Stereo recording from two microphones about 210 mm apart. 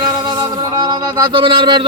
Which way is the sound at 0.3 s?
20° right (ahead or behind).